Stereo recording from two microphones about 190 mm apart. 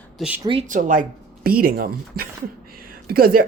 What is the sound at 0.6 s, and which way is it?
Speech, 45° right (ahead or behind).